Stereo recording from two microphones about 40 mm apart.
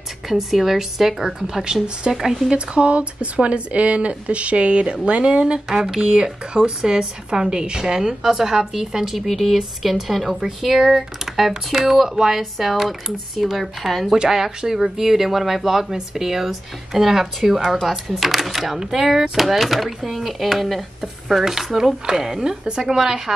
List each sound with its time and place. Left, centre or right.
0.3 s speech: centre
1.6 s speech: right
2.1 s speech: centre
2.5 s speech: right
5.7 s speech: centre
14.1 s speech: centre